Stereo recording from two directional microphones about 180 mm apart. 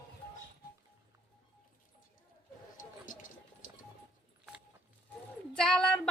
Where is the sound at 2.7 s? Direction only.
50° left (ahead or behind).